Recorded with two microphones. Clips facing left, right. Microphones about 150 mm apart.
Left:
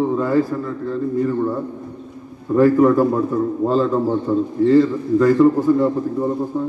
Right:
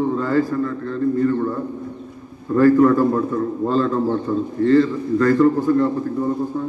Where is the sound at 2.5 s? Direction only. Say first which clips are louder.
Even; 15° left (ahead or behind).